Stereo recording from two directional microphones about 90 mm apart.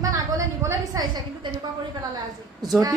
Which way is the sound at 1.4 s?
60° right (ahead or behind).